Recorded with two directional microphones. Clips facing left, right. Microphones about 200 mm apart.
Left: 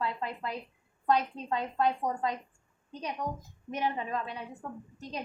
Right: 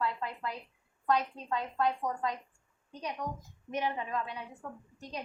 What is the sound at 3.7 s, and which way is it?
Speech, 30° left (ahead or behind).